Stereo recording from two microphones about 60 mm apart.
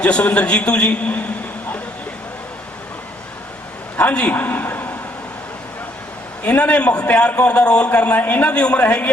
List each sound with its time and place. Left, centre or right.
0.0 s a man's voice: left
3.9 s a man's voice: left
4.4 s a sound: left
6.4 s a man's voice: left